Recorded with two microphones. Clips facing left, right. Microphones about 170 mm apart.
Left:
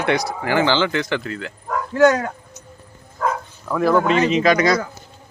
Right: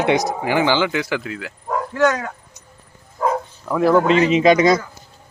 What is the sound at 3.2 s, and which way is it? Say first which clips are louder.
Bow-wow: right 2 dB; 20° right (ahead or behind).